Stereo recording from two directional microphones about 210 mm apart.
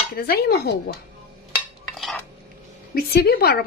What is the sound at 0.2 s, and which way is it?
Speech, 50° left (ahead or behind).